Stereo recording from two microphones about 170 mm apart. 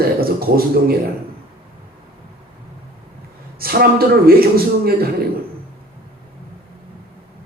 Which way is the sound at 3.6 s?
60° right (ahead or behind).